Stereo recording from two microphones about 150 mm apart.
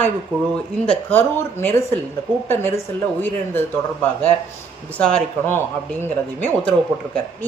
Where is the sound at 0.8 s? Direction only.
10° left (ahead or behind).